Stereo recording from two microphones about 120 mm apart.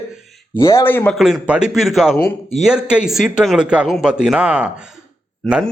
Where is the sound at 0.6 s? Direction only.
20° left (ahead or behind).